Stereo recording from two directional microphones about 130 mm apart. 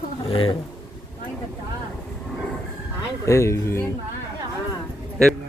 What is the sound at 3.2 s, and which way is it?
Speech, 25° left (ahead or behind).